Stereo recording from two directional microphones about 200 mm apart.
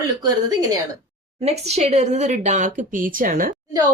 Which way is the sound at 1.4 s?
30° right (ahead or behind).